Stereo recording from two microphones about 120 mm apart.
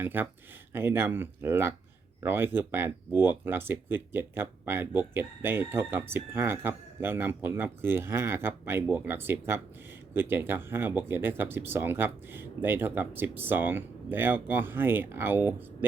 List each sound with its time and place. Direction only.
0.0 s speech: 15° right (ahead or behind)